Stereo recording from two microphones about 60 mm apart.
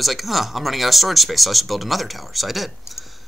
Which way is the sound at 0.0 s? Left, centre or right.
Centre.